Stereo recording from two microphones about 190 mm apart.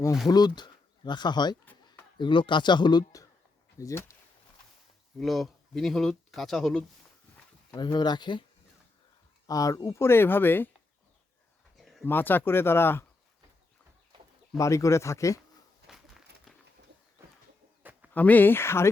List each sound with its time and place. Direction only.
0.3 s speech: 20° left (ahead or behind)
5.2 s speech: centre (ahead or behind)
7.7 s speech: 20° left (ahead or behind)
9.5 s speech: 20° left (ahead or behind)
11.8 s a sound: centre (ahead or behind)
12.0 s speech: 10° left (ahead or behind)
14.6 s speech: 15° left (ahead or behind)
15.9 s a sound: centre (ahead or behind)
18.1 s speech: 10° left (ahead or behind)